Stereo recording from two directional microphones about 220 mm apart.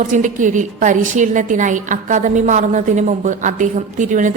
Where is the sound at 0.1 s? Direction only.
35° right (ahead or behind).